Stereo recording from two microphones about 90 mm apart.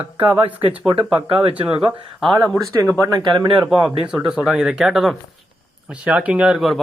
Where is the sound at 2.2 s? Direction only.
Centre (ahead or behind).